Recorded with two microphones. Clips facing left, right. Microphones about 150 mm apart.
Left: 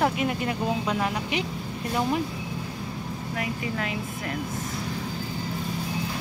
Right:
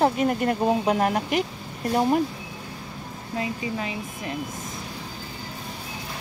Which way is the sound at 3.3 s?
25° right (ahead or behind).